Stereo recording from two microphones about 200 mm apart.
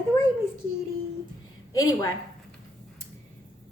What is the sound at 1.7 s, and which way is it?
Speech, 15° left (ahead or behind).